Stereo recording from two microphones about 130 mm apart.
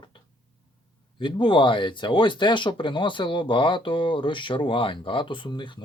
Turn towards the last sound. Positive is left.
turn(degrees=40)  # may be behind; listen again after turning